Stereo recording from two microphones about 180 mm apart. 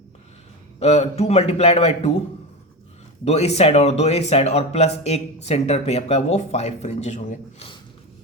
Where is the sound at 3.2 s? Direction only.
35° left (ahead or behind).